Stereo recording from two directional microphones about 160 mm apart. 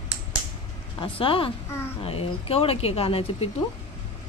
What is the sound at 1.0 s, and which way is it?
Speech, 35° left (ahead or behind).